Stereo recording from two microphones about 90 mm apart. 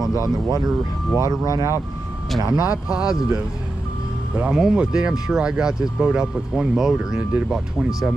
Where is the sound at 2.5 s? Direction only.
45° left (ahead or behind).